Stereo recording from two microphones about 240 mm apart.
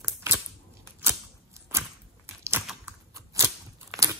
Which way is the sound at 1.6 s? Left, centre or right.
Centre.